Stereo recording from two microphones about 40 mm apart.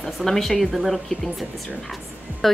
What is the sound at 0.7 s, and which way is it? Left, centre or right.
A woman's voice, centre.